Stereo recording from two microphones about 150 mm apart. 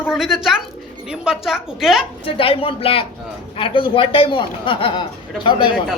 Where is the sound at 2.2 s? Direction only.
40° left (ahead or behind).